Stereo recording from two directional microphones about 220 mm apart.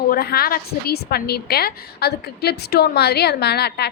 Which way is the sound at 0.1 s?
45° left (ahead or behind).